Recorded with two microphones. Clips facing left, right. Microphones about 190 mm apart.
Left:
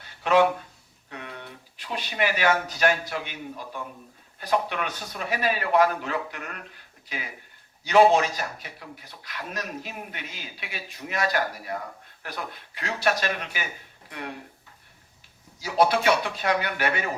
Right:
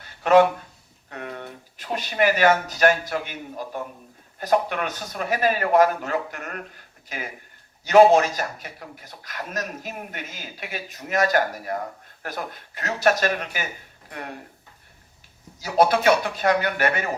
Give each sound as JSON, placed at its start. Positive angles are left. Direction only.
{"t": 0.2, "sound": "a man's voice", "side_deg": -45}
{"t": 15.6, "sound": "a man's voice", "side_deg": -45}